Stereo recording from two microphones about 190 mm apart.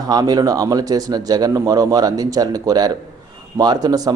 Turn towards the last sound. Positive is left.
turn(degrees=-20)  # may be behind; listen again after turning